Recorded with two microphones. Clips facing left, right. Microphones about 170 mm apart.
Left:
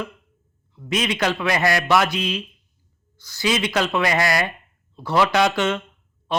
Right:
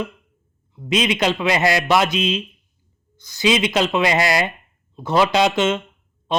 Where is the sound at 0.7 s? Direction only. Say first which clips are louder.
Right 4 dB; 20° right (ahead or behind).